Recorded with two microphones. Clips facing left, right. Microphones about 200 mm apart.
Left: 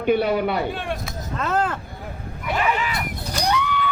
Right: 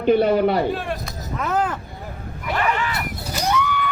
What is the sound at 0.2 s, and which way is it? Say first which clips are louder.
Speech: right 4 dB; 40° right (ahead or behind).